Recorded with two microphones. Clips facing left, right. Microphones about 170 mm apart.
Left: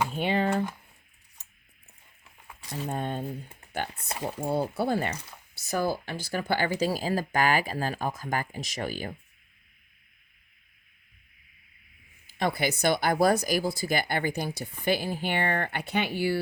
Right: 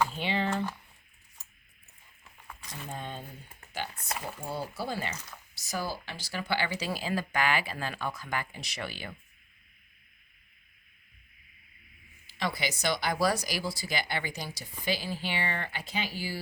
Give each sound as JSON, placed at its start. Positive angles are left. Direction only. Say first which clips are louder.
{"t": 0.1, "sound": "typing", "louder": "left 5 dB", "side_deg": 50}
{"t": 2.6, "sound": "a sound", "louder": "left 10 dB", "side_deg": 30}
{"t": 2.8, "sound": "speech", "louder": "left 8 dB", "side_deg": 55}
{"t": 4.1, "sound": "speech", "louder": "left 6 dB", "side_deg": 30}
{"t": 4.4, "sound": "speech", "louder": "left 9 dB", "side_deg": 55}
{"t": 12.4, "sound": "speech", "louder": "left 6 dB", "side_deg": 55}